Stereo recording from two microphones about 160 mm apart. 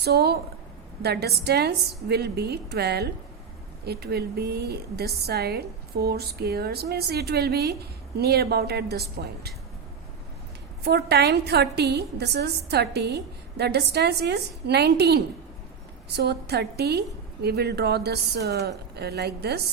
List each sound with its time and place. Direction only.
0.0 s a woman's voice: 90° right
10.8 s a woman's voice: 90° right